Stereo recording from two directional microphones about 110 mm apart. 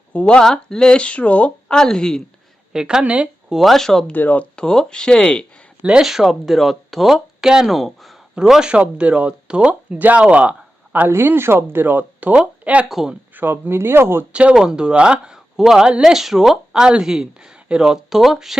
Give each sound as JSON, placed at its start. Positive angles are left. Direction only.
{"t": 0.1, "sound": "speech", "side_deg": 10}
{"t": 2.7, "sound": "speech", "side_deg": -5}
{"t": 4.1, "sound": "speech", "side_deg": 15}
{"t": 5.8, "sound": "speech", "side_deg": -5}
{"t": 13.3, "sound": "speech", "side_deg": -20}
{"t": 14.3, "sound": "speech", "side_deg": -10}